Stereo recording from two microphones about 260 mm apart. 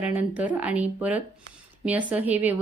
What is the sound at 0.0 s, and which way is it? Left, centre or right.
A woman's voice, centre.